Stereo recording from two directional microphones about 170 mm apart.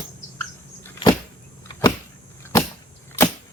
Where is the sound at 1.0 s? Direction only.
30° left (ahead or behind).